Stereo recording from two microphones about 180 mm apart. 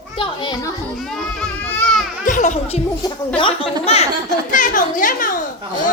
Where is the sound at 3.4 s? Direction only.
30° left (ahead or behind).